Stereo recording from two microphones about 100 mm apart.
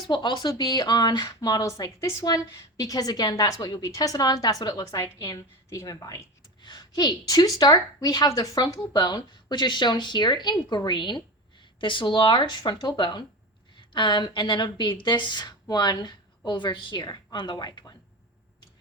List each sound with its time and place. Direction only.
0.1 s speech: 45° left (ahead or behind)
6.6 s a woman's voice: 45° left (ahead or behind)